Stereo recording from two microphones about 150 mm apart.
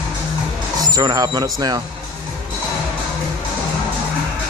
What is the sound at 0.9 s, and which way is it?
Speech, 25° right (ahead or behind).